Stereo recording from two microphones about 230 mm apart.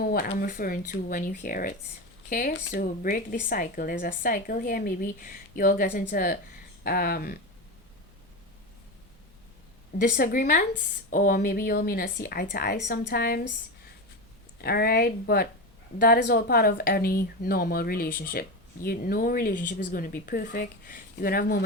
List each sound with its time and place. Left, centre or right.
0.0 s speech: left
2.5 s speech: left
10.0 s speech: left
14.6 s speech: left